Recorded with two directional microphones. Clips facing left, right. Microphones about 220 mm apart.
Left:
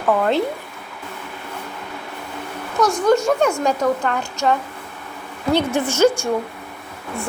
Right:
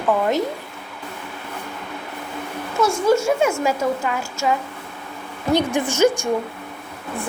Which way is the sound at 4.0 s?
5° right (ahead or behind).